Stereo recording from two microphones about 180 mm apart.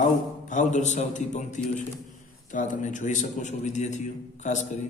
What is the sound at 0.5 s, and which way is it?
A man's voice, 40° left (ahead or behind).